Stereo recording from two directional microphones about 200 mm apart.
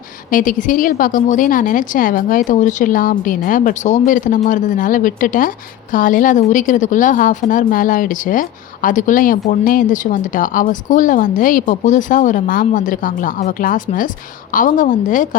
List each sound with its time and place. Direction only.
0.3 s a woman's voice: 40° left (ahead or behind)